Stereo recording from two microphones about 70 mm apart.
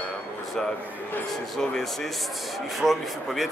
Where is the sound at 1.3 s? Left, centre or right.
Centre.